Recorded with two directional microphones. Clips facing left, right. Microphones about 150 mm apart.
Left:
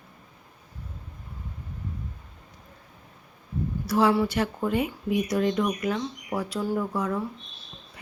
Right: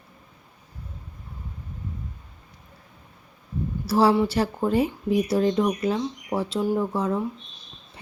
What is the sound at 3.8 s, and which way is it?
Speech, 30° right (ahead or behind).